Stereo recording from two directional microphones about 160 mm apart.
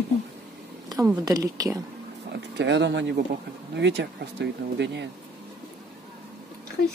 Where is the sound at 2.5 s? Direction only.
90° right.